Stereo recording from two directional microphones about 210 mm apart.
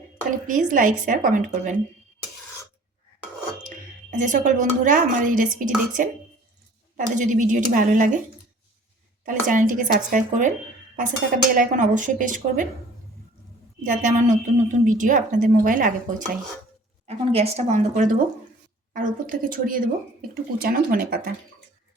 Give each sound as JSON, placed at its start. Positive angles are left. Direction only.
{"t": 0.3, "sound": "speech", "side_deg": -40}
{"t": 4.2, "sound": "speech", "side_deg": -35}
{"t": 9.2, "sound": "speech", "side_deg": -40}
{"t": 11.5, "sound": "speech", "side_deg": -35}
{"t": 13.8, "sound": "speech", "side_deg": -40}
{"t": 17.1, "sound": "speech", "side_deg": -30}